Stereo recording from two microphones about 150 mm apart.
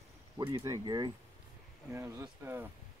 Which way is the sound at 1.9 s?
15° right (ahead or behind).